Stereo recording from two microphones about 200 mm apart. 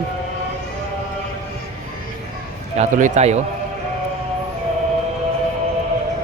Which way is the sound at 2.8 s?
40° right (ahead or behind).